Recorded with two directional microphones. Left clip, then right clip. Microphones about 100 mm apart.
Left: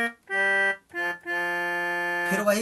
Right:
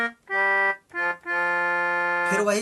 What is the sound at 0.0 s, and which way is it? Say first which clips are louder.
Organ: right 1 dB; 30° left (ahead or behind).